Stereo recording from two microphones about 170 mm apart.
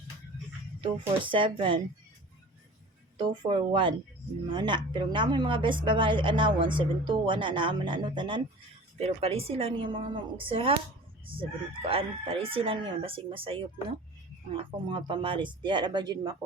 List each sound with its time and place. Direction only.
0.8 s a woman's voice: 30° right (ahead or behind)
3.2 s a woman's voice: 30° right (ahead or behind)